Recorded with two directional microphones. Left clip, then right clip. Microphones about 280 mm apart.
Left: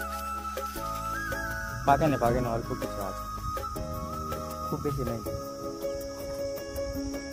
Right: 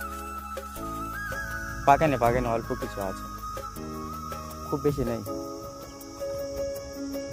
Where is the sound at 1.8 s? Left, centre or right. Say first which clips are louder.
Right 3 dB; right.